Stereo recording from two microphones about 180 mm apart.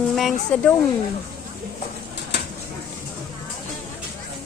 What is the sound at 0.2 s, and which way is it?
Speech, 5° left (ahead or behind).